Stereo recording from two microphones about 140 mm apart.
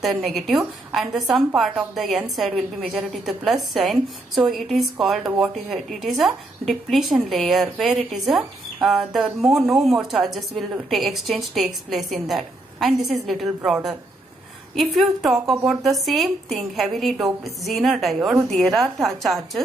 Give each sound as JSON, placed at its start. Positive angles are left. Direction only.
{"t": 0.0, "sound": "a woman's voice", "side_deg": 0}